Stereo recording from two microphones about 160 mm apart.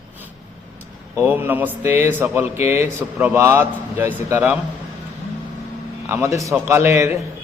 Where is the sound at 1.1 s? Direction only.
15° right (ahead or behind).